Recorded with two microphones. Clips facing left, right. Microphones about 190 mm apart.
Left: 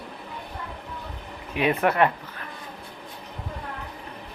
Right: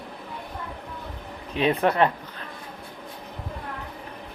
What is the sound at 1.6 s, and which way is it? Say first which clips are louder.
Speech: right 1 dB; 35° right (ahead or behind).